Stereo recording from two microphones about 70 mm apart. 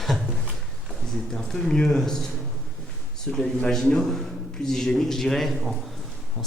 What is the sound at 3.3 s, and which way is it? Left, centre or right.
Speech, centre.